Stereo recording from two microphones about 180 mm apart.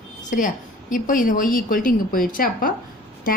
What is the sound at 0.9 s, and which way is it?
A woman's voice, 50° left (ahead or behind).